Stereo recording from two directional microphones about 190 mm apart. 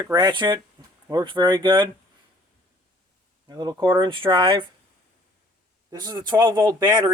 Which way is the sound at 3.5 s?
20° right (ahead or behind).